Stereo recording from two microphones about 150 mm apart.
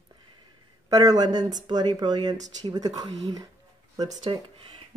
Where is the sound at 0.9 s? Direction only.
25° right (ahead or behind).